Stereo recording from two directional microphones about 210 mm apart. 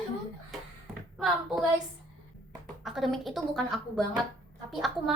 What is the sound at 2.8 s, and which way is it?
A woman's voice, centre (ahead or behind).